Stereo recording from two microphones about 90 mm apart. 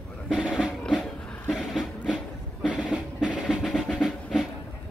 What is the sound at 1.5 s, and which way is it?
Music, 5° right (ahead or behind).